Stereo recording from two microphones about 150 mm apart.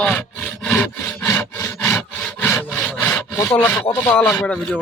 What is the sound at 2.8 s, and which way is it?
Sawing, 5° left (ahead or behind).